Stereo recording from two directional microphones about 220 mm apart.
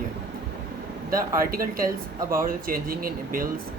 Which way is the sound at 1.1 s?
40° right (ahead or behind).